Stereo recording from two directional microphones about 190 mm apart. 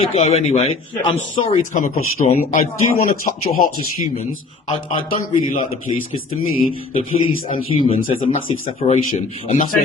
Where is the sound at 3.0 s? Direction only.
45° left (ahead or behind).